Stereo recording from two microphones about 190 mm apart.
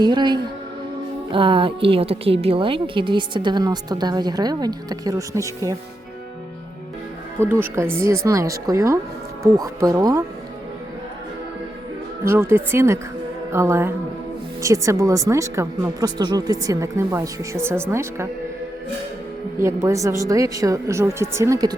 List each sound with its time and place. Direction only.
0.0 s a woman's voice: 25° right (ahead or behind)
7.3 s speech: 10° right (ahead or behind)
12.2 s speech: 15° right (ahead or behind)
19.5 s speech: 15° right (ahead or behind)